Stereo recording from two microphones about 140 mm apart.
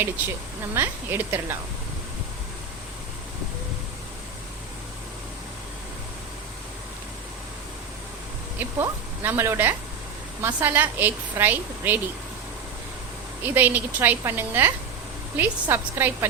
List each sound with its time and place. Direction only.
0.7 s a woman's voice: 15° right (ahead or behind)
8.5 s a woman's voice: 15° right (ahead or behind)
13.4 s a woman's voice: 15° right (ahead or behind)